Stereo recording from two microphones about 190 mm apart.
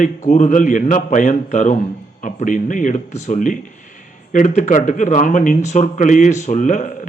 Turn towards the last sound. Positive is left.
turn(degrees=40)  # may be behind; listen again after turning